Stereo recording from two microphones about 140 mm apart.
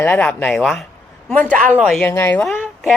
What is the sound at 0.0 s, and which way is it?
Speech, 10° left (ahead or behind).